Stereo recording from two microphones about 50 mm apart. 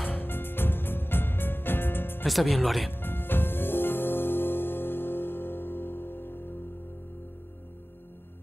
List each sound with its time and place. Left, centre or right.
0.0 s music: left
2.2 s speech: centre
2.9 s music: left